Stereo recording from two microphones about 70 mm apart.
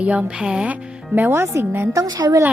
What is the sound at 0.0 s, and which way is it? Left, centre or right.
Speech, centre.